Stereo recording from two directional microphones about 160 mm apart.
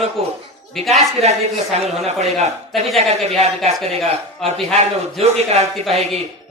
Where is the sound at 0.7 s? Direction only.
Centre (ahead or behind).